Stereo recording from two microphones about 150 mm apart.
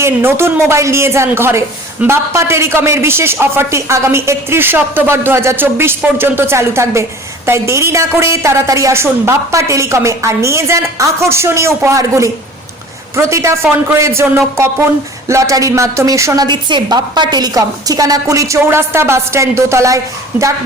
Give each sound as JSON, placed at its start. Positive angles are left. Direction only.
{"t": 0.0, "sound": "a woman's voice", "side_deg": -15}